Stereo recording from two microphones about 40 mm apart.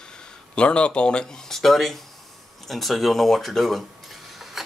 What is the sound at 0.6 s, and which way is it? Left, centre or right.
Speech, left.